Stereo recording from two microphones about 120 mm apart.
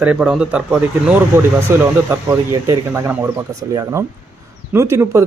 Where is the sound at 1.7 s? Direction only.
20° right (ahead or behind).